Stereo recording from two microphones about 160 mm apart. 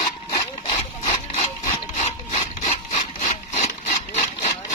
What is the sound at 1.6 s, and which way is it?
Wood, 50° left (ahead or behind).